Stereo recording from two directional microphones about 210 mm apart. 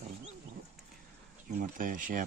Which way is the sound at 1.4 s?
40° right (ahead or behind).